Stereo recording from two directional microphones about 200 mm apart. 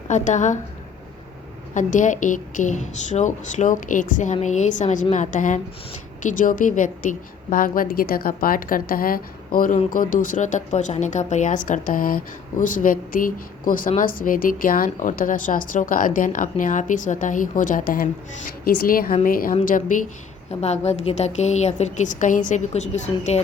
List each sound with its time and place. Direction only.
0.1 s a woman's voice: 35° left (ahead or behind)
1.7 s a woman's voice: 40° left (ahead or behind)
20.5 s a woman's voice: 30° left (ahead or behind)